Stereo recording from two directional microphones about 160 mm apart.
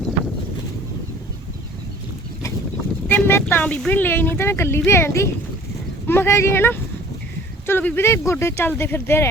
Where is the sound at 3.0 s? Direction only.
10° left (ahead or behind).